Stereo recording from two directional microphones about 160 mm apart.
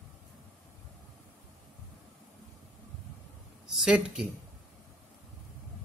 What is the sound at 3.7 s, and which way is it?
Speech, 5° right (ahead or behind).